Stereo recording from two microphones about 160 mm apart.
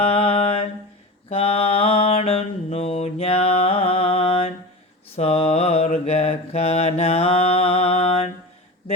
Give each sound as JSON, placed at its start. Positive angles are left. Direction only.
{"t": 0.0, "sound": "mantra", "side_deg": 40}